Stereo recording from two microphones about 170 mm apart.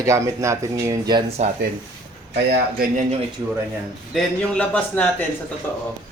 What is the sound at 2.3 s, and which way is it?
Speech, 80° right.